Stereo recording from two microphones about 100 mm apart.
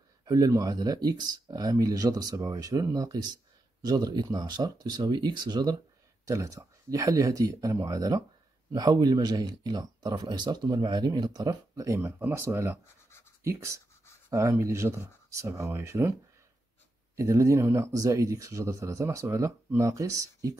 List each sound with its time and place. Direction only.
0.2 s speech: 35° right (ahead or behind)
6.2 s speech: 35° right (ahead or behind)
17.2 s speech: 30° right (ahead or behind)